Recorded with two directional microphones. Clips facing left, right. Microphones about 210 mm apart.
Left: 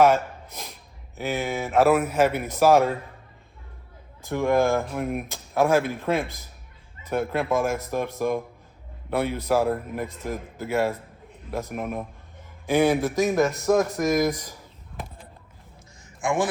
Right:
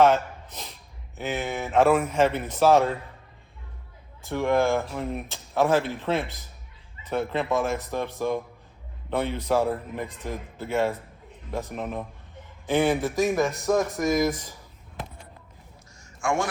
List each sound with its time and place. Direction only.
0.0 s snort: 10° left (ahead or behind)
1.2 s speech: 10° left (ahead or behind)
4.2 s a man's voice: 15° left (ahead or behind)
12.9 s speech: centre (ahead or behind)
16.2 s a man's voice: 20° left (ahead or behind)